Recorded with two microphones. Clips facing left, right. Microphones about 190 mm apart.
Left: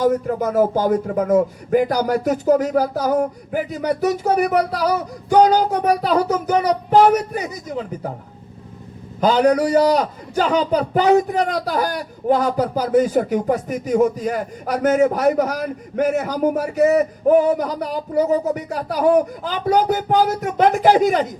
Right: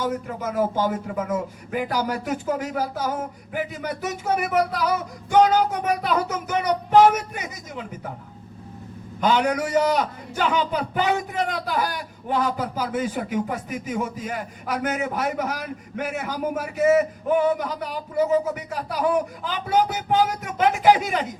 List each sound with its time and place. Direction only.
0.0 s a man's voice: 40° left (ahead or behind)
9.2 s a man's voice: 35° left (ahead or behind)